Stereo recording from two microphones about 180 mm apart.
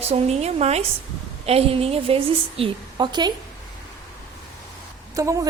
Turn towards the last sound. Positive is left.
turn(degrees=-15)  # may be behind; listen again after turning